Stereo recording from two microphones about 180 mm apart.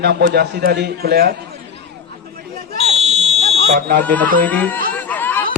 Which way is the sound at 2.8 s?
35° right (ahead or behind).